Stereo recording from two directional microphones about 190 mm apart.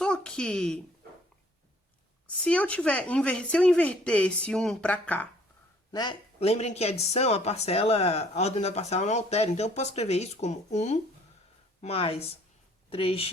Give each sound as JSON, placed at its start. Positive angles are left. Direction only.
{"t": 0.0, "sound": "speech", "side_deg": 5}
{"t": 2.2, "sound": "speech", "side_deg": 5}
{"t": 5.9, "sound": "speech", "side_deg": 25}